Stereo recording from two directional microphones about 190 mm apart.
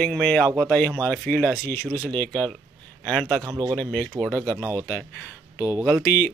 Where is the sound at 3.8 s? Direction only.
5° left (ahead or behind).